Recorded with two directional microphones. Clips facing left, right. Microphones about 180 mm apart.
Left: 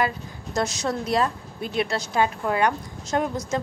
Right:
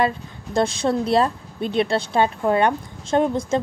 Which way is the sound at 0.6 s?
30° right (ahead or behind).